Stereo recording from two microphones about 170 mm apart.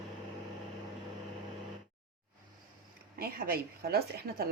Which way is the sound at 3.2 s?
65° right (ahead or behind).